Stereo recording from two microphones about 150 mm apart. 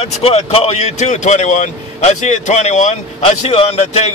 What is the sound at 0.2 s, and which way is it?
Speech, 40° left (ahead or behind).